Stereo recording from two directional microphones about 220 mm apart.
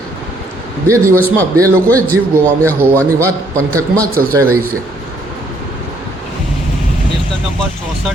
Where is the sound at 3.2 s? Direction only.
15° right (ahead or behind).